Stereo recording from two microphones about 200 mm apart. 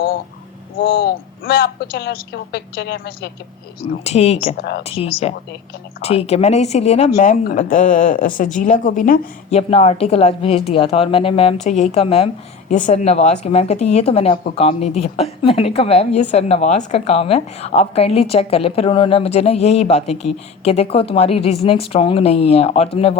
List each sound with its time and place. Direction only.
0.8 s a woman's voice: 55° left (ahead or behind)
4.0 s a woman's voice: 30° left (ahead or behind)
4.5 s a woman's voice: 55° left (ahead or behind)
4.9 s a woman's voice: 30° left (ahead or behind)